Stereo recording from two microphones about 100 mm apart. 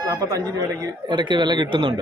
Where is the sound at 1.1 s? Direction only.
50° right (ahead or behind).